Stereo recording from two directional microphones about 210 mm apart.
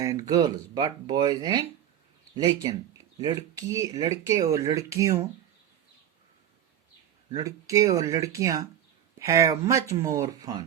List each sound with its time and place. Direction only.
0.0 s speech: 15° right (ahead or behind)
7.4 s speech: 15° right (ahead or behind)